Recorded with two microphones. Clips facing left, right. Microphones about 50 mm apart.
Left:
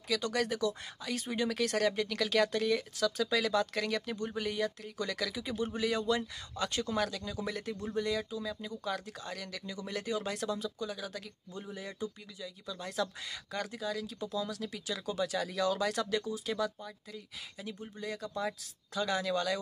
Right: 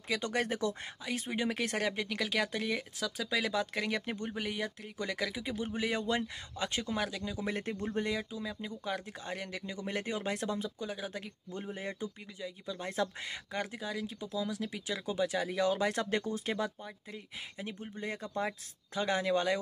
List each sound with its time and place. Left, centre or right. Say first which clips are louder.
0.1 s speech: left 1 dB; right
1.0 s speech: left 1 dB; right
4.3 s speech: left 5 dB; centre
7.5 s speech: right 1 dB; right
8.1 s speech: left 2 dB; centre
11.5 s speech: right 3 dB; right
16.5 s speech: left 1 dB; right